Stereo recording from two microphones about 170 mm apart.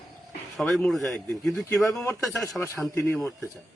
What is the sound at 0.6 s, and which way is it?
A man's voice, centre (ahead or behind).